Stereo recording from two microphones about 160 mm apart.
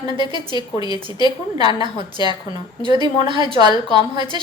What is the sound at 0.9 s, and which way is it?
Speech, 30° left (ahead or behind).